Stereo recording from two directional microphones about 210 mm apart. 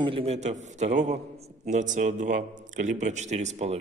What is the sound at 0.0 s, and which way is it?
A man's voice, 25° right (ahead or behind).